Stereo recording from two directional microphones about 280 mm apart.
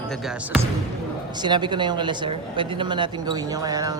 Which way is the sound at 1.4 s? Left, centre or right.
Centre.